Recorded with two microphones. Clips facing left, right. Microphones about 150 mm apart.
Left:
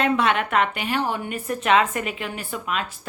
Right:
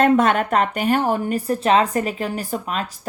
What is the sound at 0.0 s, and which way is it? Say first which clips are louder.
Speech: right 5 dB; 45° right (ahead or behind).